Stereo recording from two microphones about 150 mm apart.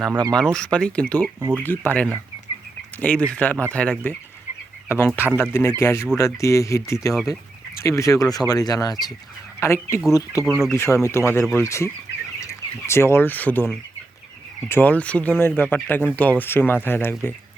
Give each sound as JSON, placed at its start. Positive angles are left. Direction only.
{"t": 0.3, "sound": "speech", "side_deg": 5}
{"t": 1.4, "sound": "speech", "side_deg": -20}
{"t": 1.6, "sound": "speech", "side_deg": 15}
{"t": 10.4, "sound": "speech", "side_deg": 0}
{"t": 10.7, "sound": "speech", "side_deg": 20}
{"t": 14.7, "sound": "speech", "side_deg": 10}